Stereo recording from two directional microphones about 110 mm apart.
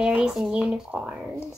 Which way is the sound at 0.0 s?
5° right (ahead or behind).